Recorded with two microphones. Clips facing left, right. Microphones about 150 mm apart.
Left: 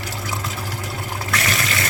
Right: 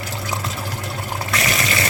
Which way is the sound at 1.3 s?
5° right (ahead or behind).